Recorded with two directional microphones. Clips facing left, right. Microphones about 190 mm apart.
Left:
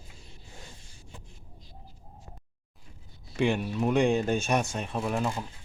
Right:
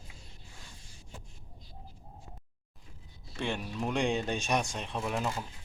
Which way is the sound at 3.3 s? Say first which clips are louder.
Left 8 dB; 10° left (ahead or behind).